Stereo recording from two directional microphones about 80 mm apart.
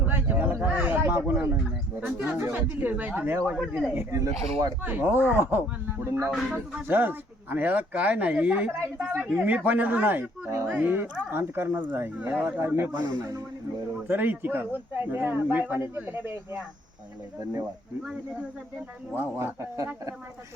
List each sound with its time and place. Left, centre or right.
0.0 s a sound: right
0.9 s a sound: right
2.0 s speech: centre
4.8 s speech: right
6.1 s speech: right
6.5 s speech: right
19.1 s speech: right